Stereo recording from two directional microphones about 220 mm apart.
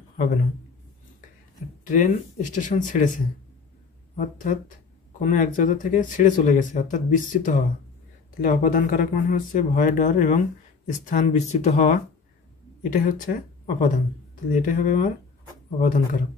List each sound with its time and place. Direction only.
1.9 s speech: 35° left (ahead or behind)
4.2 s speech: 35° left (ahead or behind)
13.0 s speech: 35° left (ahead or behind)